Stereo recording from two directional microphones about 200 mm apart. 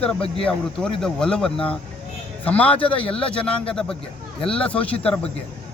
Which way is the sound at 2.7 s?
25° left (ahead or behind).